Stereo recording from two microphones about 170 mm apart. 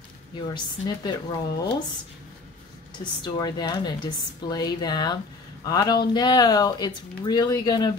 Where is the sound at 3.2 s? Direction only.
25° left (ahead or behind).